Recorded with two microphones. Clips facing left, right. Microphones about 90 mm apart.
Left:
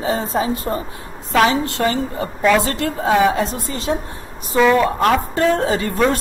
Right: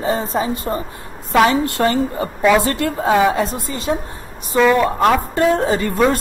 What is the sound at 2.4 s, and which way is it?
Speech, 5° right (ahead or behind).